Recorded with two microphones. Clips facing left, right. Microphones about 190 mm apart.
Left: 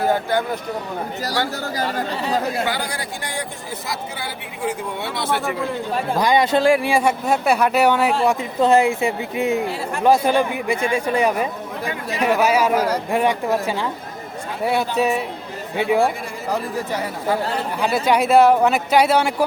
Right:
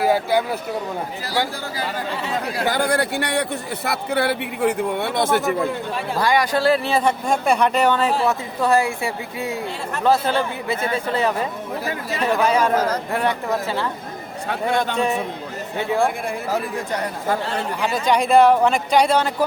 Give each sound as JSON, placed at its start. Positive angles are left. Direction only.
{"t": 0.0, "sound": "speech", "side_deg": -10}
{"t": 1.6, "sound": "speech", "side_deg": 45}
{"t": 2.6, "sound": "speech", "side_deg": -50}
{"t": 6.1, "sound": "a man's voice", "side_deg": 20}
{"t": 6.7, "sound": "speech", "side_deg": 10}